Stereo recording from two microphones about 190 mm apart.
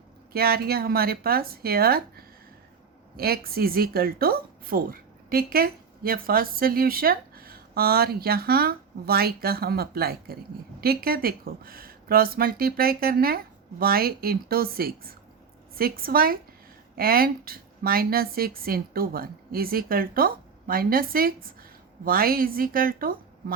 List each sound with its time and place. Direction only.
0.3 s a woman's voice: 50° right (ahead or behind)